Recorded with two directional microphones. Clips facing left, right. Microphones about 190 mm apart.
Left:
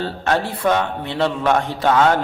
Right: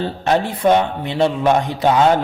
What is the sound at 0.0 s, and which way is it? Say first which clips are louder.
A man's voice: right 3 dB; 15° right (ahead or behind).